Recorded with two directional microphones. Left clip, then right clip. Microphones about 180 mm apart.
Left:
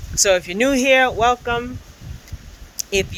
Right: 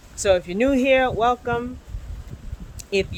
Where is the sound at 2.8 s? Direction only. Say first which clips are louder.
Left 2 dB; centre (ahead or behind).